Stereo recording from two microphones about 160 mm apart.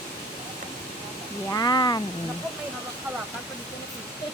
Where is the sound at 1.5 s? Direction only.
25° left (ahead or behind).